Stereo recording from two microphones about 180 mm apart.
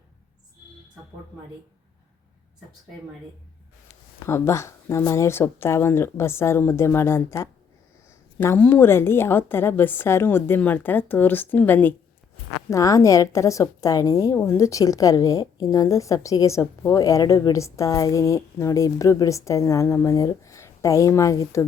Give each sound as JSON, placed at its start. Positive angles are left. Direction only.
{"t": 4.3, "sound": "a woman's voice", "side_deg": 15}